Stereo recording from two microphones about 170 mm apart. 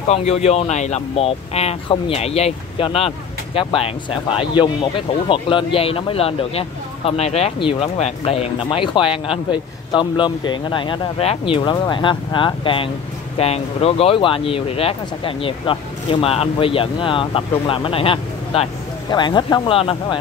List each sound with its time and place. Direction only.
0.1 s speech: 40° left (ahead or behind)
5.3 s speech: 30° left (ahead or behind)